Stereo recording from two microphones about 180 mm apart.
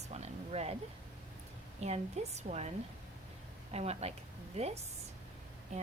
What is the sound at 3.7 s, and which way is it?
Speech, 35° right (ahead or behind).